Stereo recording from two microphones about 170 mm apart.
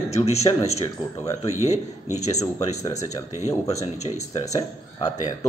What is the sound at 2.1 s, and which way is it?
Speech, 40° left (ahead or behind).